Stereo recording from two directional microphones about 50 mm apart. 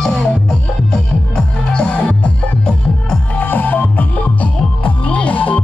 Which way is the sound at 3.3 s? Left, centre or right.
Left.